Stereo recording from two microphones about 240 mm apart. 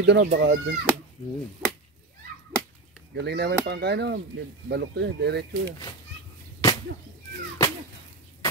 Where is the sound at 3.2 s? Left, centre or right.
Right.